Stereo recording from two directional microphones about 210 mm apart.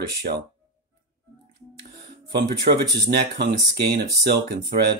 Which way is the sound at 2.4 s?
50° right (ahead or behind).